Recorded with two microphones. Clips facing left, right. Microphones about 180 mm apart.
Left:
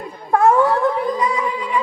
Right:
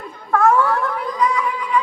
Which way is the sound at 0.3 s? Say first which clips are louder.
Left 2 dB; 25° left (ahead or behind).